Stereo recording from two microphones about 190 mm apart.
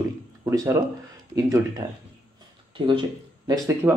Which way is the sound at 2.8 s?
25° right (ahead or behind).